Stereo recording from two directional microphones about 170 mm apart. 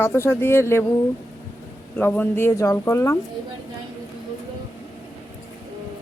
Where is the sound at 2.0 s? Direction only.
10° left (ahead or behind).